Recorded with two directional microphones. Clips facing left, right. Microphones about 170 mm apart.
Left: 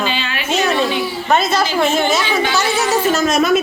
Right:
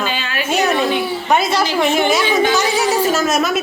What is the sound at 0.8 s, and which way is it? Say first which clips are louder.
Speech: right 1 dB; 55° right (ahead or behind).